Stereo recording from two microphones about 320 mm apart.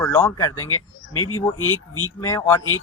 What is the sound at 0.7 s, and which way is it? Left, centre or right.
Speech, left.